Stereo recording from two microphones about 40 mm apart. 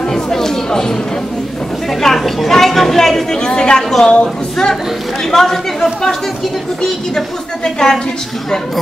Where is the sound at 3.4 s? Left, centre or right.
Left.